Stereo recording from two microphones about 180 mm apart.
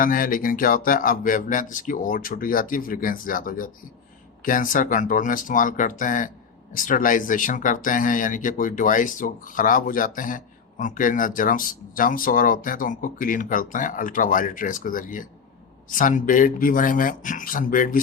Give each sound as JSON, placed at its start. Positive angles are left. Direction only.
{"t": 0.0, "sound": "speech", "side_deg": 50}